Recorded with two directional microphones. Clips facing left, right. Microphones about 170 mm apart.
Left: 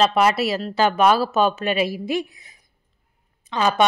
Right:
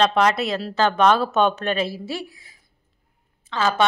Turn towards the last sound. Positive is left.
turn(degrees=15)  # may be behind; listen again after turning